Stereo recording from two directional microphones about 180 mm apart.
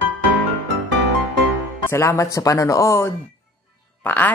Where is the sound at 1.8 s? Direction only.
15° left (ahead or behind).